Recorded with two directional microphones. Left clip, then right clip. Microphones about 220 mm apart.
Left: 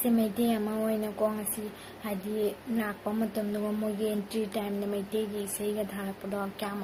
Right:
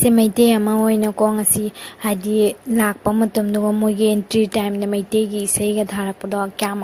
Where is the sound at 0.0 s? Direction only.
45° right (ahead or behind).